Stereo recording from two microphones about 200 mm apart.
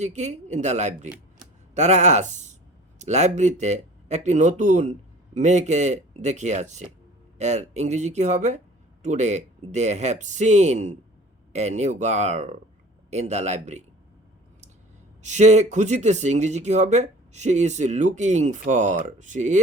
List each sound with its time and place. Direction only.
0.0 s speech: 35° right (ahead or behind)
15.2 s speech: 35° right (ahead or behind)